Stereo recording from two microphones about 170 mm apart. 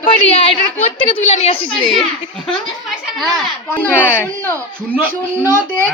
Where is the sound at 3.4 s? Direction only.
10° left (ahead or behind).